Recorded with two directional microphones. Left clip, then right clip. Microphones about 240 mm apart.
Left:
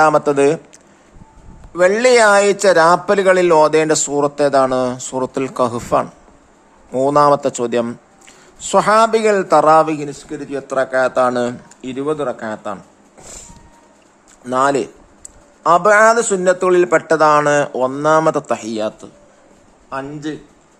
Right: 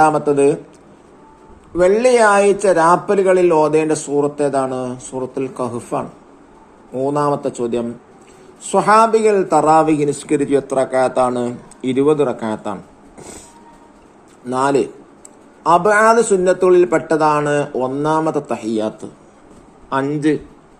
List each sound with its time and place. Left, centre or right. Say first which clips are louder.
0.0 s speech: left 1 dB; left
1.7 s speech: left 1 dB; left
10.1 s a man's voice: right 10 dB; centre
14.4 s a man's voice: left 1 dB; centre
19.9 s a man's voice: right 8 dB; centre